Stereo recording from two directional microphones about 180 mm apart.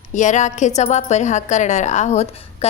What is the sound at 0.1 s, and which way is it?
A woman's voice, 45° left (ahead or behind).